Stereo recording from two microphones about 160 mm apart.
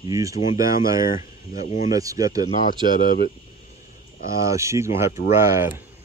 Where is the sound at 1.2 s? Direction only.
50° left (ahead or behind).